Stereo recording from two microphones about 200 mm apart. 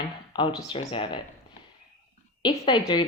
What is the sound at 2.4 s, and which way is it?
Speech, 25° left (ahead or behind).